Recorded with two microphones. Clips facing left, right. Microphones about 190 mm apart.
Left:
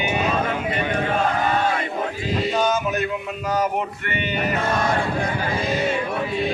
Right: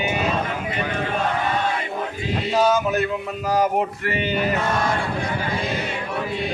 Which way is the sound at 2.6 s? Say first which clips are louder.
Right 2 dB; 35° right (ahead or behind).